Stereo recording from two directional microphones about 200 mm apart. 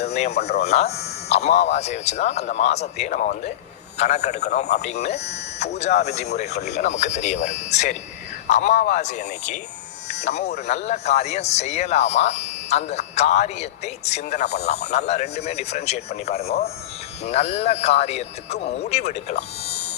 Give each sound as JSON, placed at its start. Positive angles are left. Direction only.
{"t": 0.0, "sound": "speech", "side_deg": 35}